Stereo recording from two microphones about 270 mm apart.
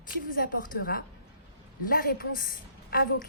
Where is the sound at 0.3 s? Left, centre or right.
Left.